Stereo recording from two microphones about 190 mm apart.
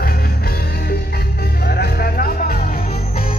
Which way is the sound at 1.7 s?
55° left (ahead or behind).